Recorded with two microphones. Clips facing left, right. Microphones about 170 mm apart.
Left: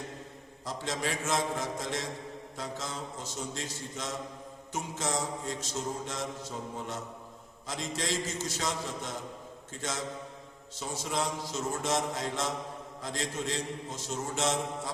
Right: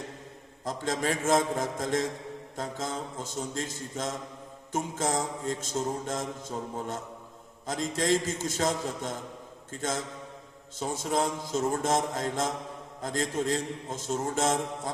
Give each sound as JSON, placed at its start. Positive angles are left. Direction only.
{"t": 0.6, "sound": "mantra", "side_deg": -50}
{"t": 10.8, "sound": "mantra", "side_deg": -45}